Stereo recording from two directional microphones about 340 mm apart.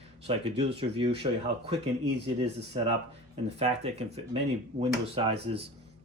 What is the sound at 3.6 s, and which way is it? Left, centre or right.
Speech, centre.